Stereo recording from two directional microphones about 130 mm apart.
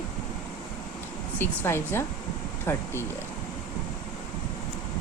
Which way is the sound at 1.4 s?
20° left (ahead or behind).